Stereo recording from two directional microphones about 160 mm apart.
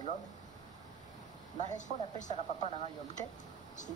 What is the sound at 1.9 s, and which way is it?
Speech, 50° left (ahead or behind).